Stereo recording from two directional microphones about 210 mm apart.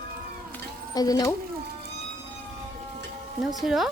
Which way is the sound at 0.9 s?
15° left (ahead or behind).